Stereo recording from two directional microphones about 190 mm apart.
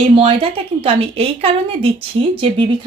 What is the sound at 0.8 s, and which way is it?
A woman's voice, 30° right (ahead or behind).